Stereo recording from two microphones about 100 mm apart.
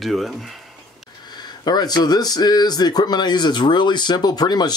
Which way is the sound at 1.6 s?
40° left (ahead or behind).